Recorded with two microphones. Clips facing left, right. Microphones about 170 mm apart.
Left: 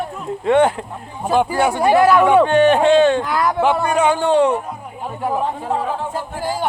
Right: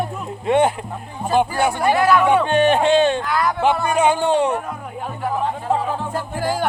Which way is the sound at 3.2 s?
10° left (ahead or behind).